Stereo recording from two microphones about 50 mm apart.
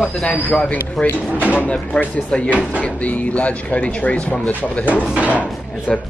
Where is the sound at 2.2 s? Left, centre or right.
Centre.